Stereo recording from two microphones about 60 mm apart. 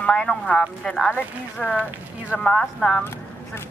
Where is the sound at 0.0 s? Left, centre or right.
Centre.